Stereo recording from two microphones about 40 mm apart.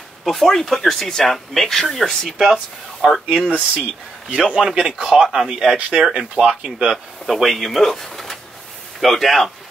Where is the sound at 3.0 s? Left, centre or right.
Centre.